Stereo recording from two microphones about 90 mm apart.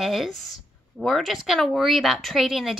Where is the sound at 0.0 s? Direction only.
Centre (ahead or behind).